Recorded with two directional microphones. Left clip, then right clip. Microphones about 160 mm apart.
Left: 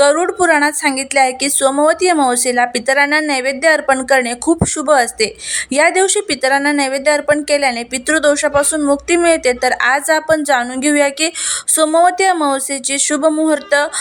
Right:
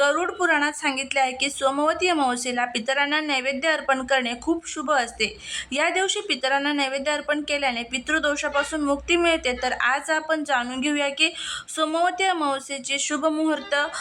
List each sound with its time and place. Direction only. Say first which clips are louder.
0.0 s speech: left 9 dB; 30° left (ahead or behind)